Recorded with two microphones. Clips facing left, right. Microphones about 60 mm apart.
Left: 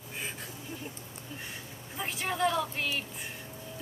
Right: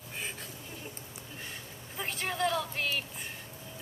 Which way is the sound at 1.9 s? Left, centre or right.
Centre.